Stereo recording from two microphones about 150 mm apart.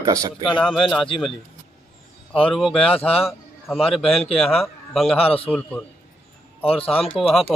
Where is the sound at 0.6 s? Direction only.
5° right (ahead or behind).